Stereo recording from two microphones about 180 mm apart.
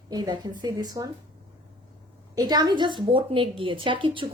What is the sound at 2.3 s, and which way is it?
Speech, 20° right (ahead or behind).